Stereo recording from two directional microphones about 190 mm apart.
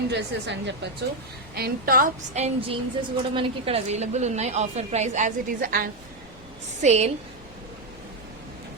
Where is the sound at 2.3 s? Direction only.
35° right (ahead or behind).